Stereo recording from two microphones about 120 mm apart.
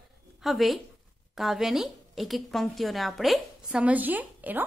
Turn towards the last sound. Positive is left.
turn(degrees=-15)  # may be behind; listen again after turning